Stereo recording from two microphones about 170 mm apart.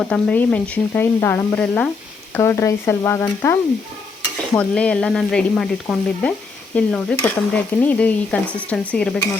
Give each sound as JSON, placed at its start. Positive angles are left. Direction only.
{"t": 0.0, "sound": "speech", "side_deg": 5}
{"t": 4.5, "sound": "sizzle", "side_deg": 5}
{"t": 6.7, "sound": "speech", "side_deg": 5}